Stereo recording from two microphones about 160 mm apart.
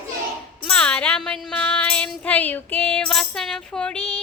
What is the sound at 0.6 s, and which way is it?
Music, 5° left (ahead or behind).